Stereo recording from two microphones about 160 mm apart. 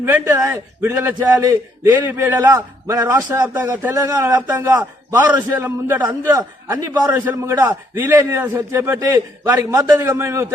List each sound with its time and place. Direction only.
0.0 s a man's voice: 15° right (ahead or behind)